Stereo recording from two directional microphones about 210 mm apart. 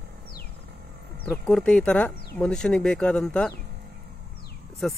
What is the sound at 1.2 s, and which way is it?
Speech, 5° left (ahead or behind).